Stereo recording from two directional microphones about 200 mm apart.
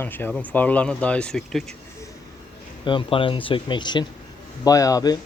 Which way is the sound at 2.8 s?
25° left (ahead or behind).